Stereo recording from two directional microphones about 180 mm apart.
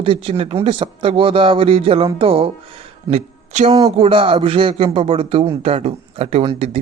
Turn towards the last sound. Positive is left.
turn(degrees=-35)  # may be behind; listen again after turning